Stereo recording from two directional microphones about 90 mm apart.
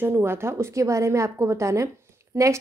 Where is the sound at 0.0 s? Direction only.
25° right (ahead or behind).